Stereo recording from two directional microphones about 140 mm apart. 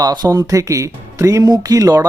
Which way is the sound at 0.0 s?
30° right (ahead or behind).